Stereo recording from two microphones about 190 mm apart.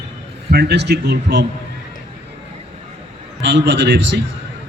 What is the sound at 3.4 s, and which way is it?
Speech, 70° right (ahead or behind).